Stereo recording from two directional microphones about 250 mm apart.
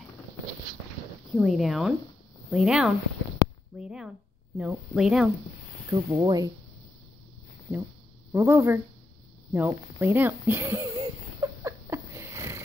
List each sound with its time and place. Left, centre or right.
1.3 s speech: centre
5.9 s speech: centre
8.3 s speech: centre
9.5 s a sound: centre